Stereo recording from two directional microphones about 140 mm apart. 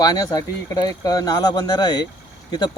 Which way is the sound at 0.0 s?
25° left (ahead or behind).